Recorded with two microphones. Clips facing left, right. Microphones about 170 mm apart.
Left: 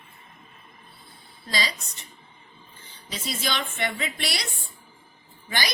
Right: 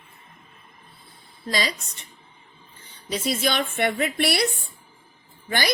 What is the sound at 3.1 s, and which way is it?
A woman's voice, 55° right (ahead or behind).